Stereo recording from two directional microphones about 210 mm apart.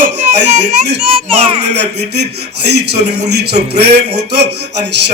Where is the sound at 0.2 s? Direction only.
35° right (ahead or behind).